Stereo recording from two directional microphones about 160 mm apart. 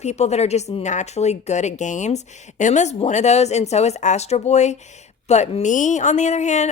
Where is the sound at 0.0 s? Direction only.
45° left (ahead or behind).